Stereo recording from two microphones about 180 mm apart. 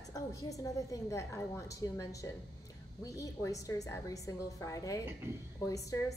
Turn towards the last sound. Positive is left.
turn(degrees=20)  # may be behind; listen again after turning